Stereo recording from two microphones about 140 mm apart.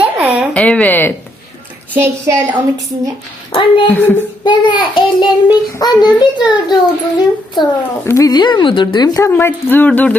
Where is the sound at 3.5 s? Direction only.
35° left (ahead or behind).